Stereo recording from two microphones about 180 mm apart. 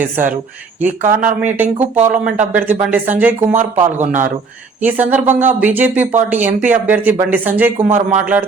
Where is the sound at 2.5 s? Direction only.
10° right (ahead or behind).